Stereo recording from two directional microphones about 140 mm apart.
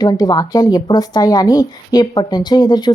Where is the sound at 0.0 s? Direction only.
30° left (ahead or behind).